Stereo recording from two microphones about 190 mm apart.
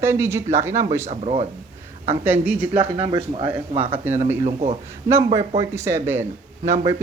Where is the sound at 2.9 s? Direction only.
25° right (ahead or behind).